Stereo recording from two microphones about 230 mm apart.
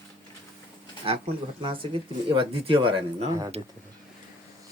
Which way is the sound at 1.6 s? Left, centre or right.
Right.